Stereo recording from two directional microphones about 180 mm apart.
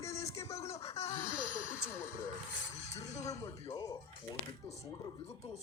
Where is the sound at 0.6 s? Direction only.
35° left (ahead or behind).